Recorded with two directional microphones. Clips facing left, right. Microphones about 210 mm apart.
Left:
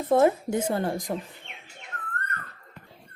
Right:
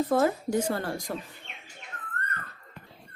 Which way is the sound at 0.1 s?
20° left (ahead or behind).